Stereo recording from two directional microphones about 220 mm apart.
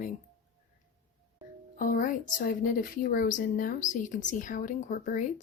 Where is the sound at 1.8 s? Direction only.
40° left (ahead or behind).